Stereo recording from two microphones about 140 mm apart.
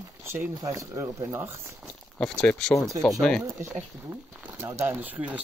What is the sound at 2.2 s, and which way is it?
Speech, 5° left (ahead or behind).